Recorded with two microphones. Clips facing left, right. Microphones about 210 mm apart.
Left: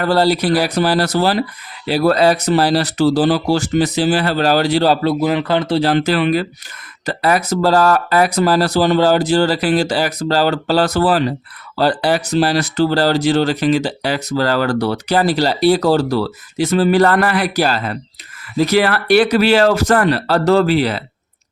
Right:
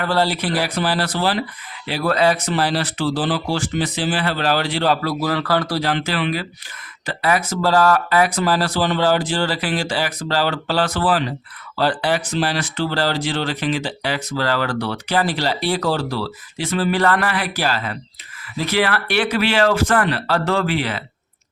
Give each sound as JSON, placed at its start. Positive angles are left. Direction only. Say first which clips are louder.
{"t": 0.0, "sound": "speech", "louder": "left 6 dB", "side_deg": 40}
{"t": 5.2, "sound": "speech", "louder": "left 4 dB", "side_deg": 20}
{"t": 5.9, "sound": "speech", "louder": "left 7 dB", "side_deg": 40}